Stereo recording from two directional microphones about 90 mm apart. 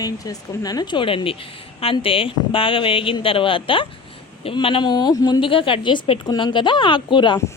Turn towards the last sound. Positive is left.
turn(degrees=60)  # may be behind; listen again after turning